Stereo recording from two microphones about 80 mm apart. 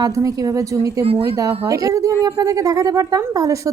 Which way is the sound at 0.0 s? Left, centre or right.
Right.